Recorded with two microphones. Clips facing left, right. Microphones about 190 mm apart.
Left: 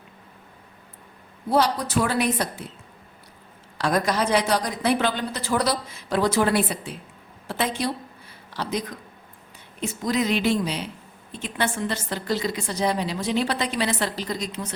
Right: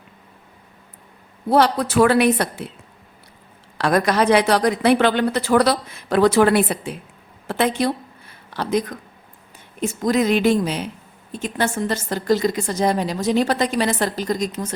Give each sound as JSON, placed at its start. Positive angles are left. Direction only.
{"t": 1.5, "sound": "a woman's voice", "side_deg": -65}
{"t": 3.8, "sound": "a woman's voice", "side_deg": -65}
{"t": 7.8, "sound": "a sound", "side_deg": -55}
{"t": 9.8, "sound": "a woman's voice", "side_deg": -50}